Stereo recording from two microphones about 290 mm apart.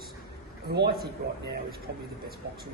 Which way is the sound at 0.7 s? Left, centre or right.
Right.